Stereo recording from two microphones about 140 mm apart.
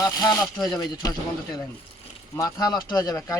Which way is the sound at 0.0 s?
25° left (ahead or behind).